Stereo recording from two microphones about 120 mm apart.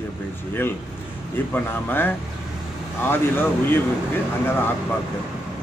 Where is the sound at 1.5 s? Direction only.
15° left (ahead or behind).